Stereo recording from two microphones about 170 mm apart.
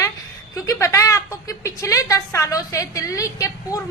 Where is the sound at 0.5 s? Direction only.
20° left (ahead or behind).